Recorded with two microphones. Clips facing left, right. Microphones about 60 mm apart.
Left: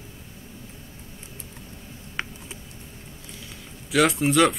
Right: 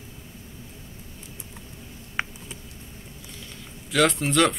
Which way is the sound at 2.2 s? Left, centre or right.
Centre.